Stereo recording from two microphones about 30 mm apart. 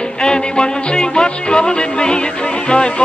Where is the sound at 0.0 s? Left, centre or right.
Left.